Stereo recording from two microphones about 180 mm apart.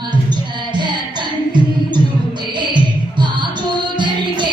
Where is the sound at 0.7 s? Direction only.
25° right (ahead or behind).